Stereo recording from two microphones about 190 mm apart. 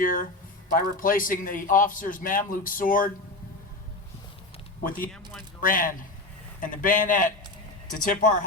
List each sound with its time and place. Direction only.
0.0 s a man's voice: 45° left (ahead or behind)
4.8 s a man's voice: 45° left (ahead or behind)